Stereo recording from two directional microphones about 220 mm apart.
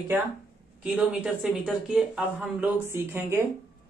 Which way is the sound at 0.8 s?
Centre (ahead or behind).